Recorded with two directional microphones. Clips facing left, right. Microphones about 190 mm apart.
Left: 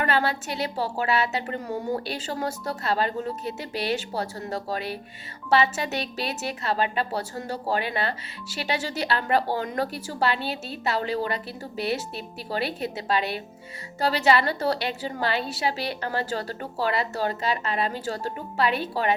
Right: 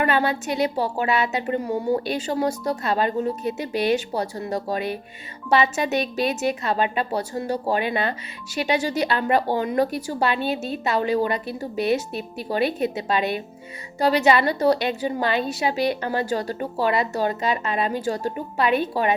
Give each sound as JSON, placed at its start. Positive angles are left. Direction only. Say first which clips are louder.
{"t": 0.0, "sound": "speech", "louder": "right 3 dB", "side_deg": -15}